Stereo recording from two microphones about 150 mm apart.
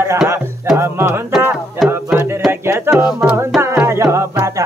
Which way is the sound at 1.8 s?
Centre (ahead or behind).